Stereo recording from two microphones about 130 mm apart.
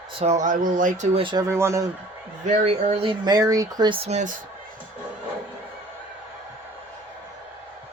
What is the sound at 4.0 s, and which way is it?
Speech, 60° right (ahead or behind).